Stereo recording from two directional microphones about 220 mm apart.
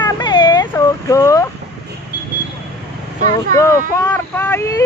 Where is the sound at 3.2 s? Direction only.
15° left (ahead or behind).